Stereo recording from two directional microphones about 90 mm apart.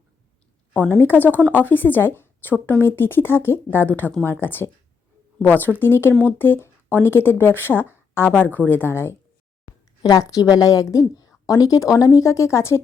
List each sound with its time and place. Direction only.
0.7 s a woman's voice: 20° left (ahead or behind)
10.0 s speech: 45° left (ahead or behind)